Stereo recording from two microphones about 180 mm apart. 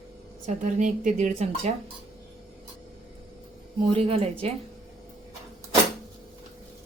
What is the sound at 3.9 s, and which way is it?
Speech, 30° right (ahead or behind).